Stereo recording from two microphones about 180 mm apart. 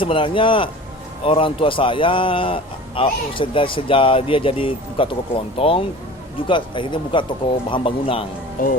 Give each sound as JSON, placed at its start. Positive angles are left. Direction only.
{"t": 0.0, "sound": "a man's voice", "side_deg": 30}
{"t": 8.6, "sound": "speech", "side_deg": 50}